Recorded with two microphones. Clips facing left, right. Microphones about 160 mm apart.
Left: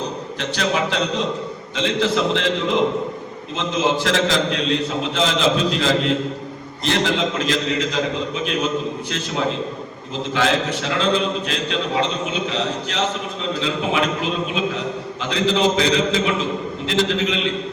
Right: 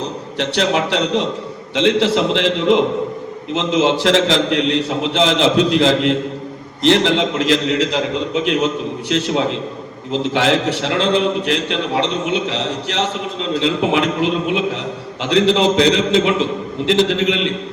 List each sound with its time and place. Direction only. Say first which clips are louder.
0.3 s a man's voice: right 5 dB; 70° right (ahead or behind)
14.2 s a man's voice: right 5 dB; 70° right (ahead or behind)